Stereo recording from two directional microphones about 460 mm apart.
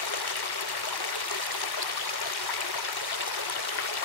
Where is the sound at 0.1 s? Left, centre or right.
Left.